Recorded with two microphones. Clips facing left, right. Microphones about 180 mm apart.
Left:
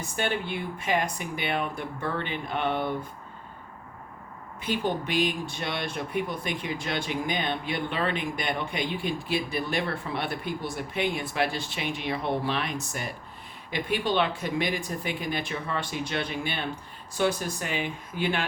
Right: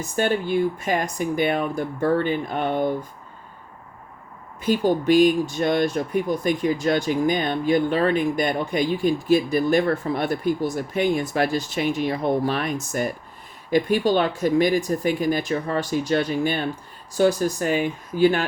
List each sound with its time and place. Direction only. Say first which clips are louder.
0.2 s speech: right 9 dB; 40° right (ahead or behind)
4.6 s speech: right 9 dB; 40° right (ahead or behind)